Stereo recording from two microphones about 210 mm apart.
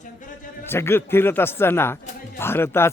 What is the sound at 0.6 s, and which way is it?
Speech, 10° left (ahead or behind).